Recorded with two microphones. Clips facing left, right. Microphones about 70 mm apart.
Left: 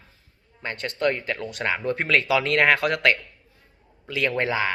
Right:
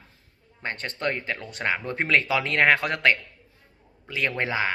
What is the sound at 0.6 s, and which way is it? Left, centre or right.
Speech, right.